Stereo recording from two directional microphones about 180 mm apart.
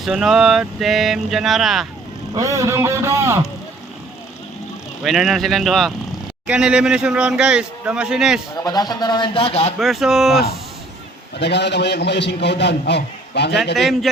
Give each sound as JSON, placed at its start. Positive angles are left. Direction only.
{"t": 0.0, "sound": "speech", "side_deg": -5}
{"t": 2.3, "sound": "a man's voice", "side_deg": -20}
{"t": 5.0, "sound": "speech", "side_deg": 0}
{"t": 8.5, "sound": "a man's voice", "side_deg": 20}
{"t": 9.7, "sound": "speech", "side_deg": 0}
{"t": 11.3, "sound": "a man's voice", "side_deg": 70}
{"t": 13.7, "sound": "speech", "side_deg": 0}